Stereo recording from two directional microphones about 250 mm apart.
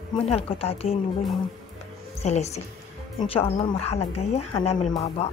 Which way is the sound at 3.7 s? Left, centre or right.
Left.